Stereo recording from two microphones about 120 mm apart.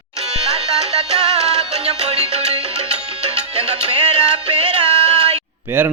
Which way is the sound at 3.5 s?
60° right (ahead or behind).